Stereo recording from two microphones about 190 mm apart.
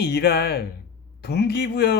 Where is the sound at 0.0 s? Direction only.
55° left (ahead or behind).